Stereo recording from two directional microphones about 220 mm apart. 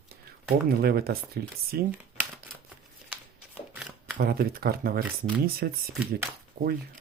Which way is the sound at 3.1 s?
5° right (ahead or behind).